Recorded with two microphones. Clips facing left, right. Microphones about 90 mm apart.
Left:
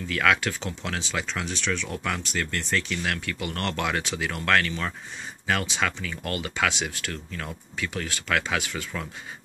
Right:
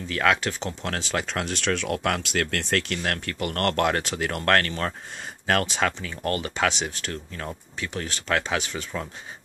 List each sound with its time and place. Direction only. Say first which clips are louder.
0.1 s speech: right 1 dB; 30° right (ahead or behind)
0.8 s speech: right 2 dB; 45° right (ahead or behind)
5.9 s speech: right 3 dB; 35° right (ahead or behind)